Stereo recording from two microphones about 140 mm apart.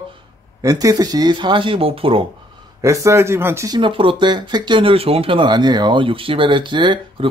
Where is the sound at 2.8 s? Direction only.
20° right (ahead or behind).